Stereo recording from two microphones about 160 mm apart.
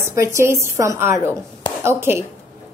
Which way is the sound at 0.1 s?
20° right (ahead or behind).